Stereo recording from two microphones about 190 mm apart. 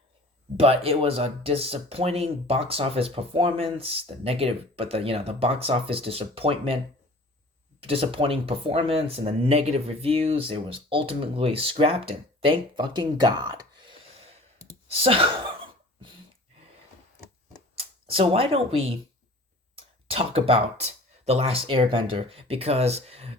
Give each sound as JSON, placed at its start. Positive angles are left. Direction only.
{"t": 0.5, "sound": "speech", "side_deg": -30}
{"t": 7.8, "sound": "speech", "side_deg": -30}
{"t": 17.7, "sound": "speech", "side_deg": -30}
{"t": 20.1, "sound": "speech", "side_deg": -30}